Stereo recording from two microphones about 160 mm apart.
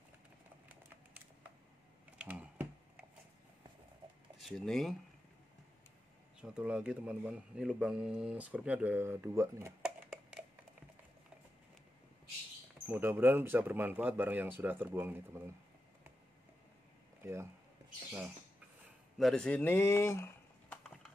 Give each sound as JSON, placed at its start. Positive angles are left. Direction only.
{"t": 2.1, "sound": "typing", "side_deg": -10}
{"t": 4.4, "sound": "speech", "side_deg": 0}
{"t": 6.4, "sound": "speech", "side_deg": -5}
{"t": 9.8, "sound": "a sound", "side_deg": -5}
{"t": 12.8, "sound": "speech", "side_deg": -10}
{"t": 17.2, "sound": "speech", "side_deg": -15}
{"t": 19.1, "sound": "speech", "side_deg": 5}